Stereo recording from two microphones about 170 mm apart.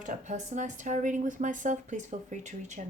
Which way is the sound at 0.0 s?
45° right (ahead or behind).